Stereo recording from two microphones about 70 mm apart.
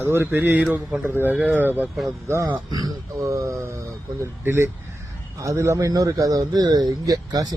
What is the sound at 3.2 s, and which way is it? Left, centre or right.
Speech, right.